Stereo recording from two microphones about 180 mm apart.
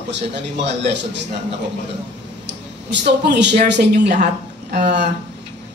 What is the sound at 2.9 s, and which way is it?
A man's voice, 75° right (ahead or behind).